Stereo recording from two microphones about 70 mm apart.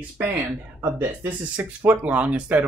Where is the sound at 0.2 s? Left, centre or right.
Right.